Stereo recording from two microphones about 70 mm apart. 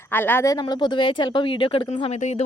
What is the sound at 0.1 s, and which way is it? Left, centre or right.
Speech, left.